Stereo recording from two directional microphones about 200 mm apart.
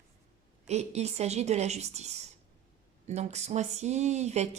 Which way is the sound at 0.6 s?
35° right (ahead or behind).